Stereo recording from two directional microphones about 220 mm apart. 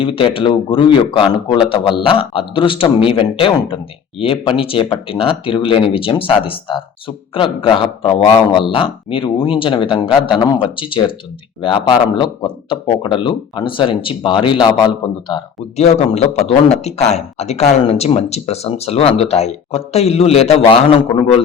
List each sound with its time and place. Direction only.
0.0 s a man's voice: 25° left (ahead or behind)